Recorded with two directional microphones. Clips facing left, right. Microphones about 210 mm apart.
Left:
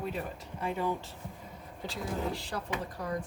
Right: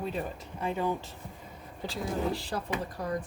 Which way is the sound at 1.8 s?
35° right (ahead or behind).